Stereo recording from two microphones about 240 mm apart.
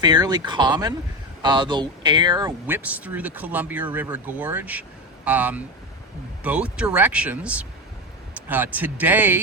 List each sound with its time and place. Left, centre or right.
0.0 s speech: centre